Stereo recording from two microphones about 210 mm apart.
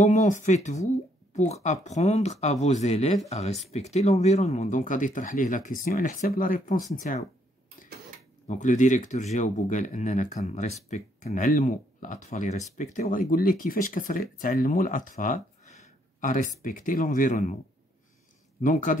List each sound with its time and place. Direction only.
0.0 s speech: 35° left (ahead or behind)
8.5 s speech: 35° left (ahead or behind)
18.6 s speech: 40° left (ahead or behind)